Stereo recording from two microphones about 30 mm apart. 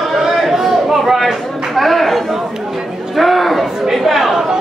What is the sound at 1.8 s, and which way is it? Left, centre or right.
Chatter, centre.